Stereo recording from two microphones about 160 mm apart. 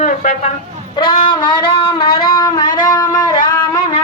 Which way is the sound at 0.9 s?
30° left (ahead or behind).